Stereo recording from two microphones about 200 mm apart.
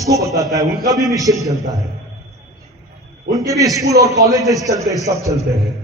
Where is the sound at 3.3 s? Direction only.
15° right (ahead or behind).